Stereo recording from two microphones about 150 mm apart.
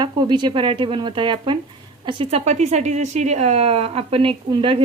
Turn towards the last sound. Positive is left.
turn(degrees=-35)  # may be behind; listen again after turning